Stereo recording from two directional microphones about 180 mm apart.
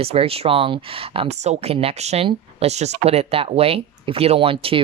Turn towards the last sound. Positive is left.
turn(degrees=-30)  # may be behind; listen again after turning